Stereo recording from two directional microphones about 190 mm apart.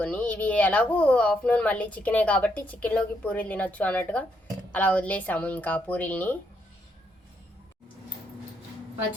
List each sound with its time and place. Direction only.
0.0 s speech: 5° left (ahead or behind)